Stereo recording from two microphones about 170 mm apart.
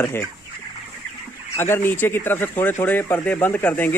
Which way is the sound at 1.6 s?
15° left (ahead or behind).